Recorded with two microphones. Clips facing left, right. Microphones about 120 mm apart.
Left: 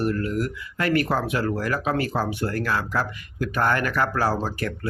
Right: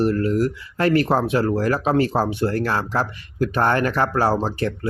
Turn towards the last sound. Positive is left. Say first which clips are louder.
# right 4 dB
turn(degrees=-25)  # may be behind; listen again after turning